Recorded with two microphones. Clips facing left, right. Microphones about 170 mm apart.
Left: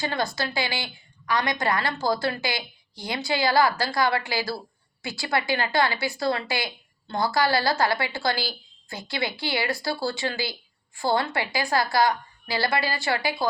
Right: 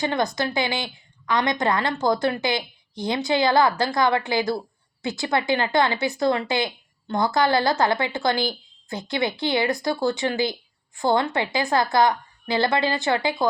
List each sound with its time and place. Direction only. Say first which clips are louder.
0.0 s a woman's voice: right 4 dB; 20° right (ahead or behind)